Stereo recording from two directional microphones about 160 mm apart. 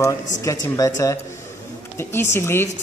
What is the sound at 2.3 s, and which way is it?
Speech, 15° left (ahead or behind).